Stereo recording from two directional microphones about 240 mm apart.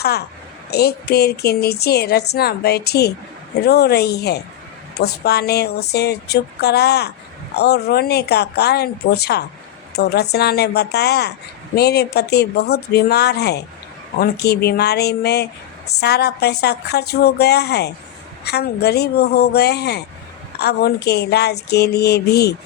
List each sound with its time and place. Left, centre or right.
0.0 s a woman's voice: left